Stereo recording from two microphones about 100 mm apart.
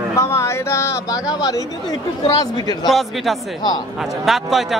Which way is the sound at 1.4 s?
40° left (ahead or behind).